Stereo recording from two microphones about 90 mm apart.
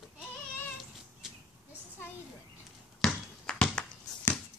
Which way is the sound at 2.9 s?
10° left (ahead or behind).